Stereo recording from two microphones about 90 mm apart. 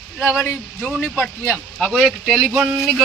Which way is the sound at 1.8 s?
5° right (ahead or behind).